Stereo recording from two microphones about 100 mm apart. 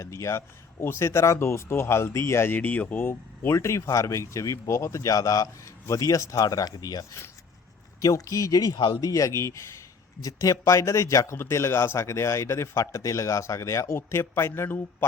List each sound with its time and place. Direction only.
0.0 s speech: 30° left (ahead or behind)